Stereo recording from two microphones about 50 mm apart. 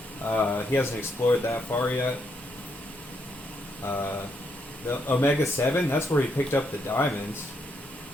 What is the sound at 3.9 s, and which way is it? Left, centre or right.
Speech, left.